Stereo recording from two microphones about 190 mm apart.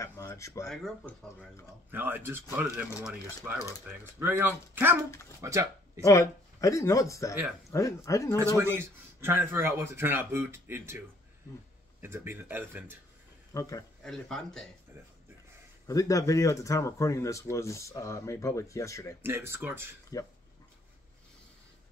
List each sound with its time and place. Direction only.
0.0 s speech: 15° left (ahead or behind)
0.7 s speech: 5° left (ahead or behind)
1.9 s speech: 10° right (ahead or behind)
5.9 s speech: 15° left (ahead or behind)
8.5 s speech: 10° right (ahead or behind)
13.5 s speech: 20° left (ahead or behind)
14.0 s speech: 5° left (ahead or behind)
15.9 s speech: 15° left (ahead or behind)
19.2 s speech: 10° right (ahead or behind)
20.1 s speech: 20° left (ahead or behind)